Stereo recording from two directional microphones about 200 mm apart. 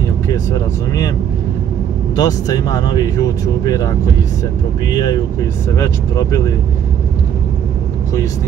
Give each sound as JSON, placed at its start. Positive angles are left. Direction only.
{"t": 0.3, "sound": "speech", "side_deg": 15}
{"t": 2.1, "sound": "speech", "side_deg": 20}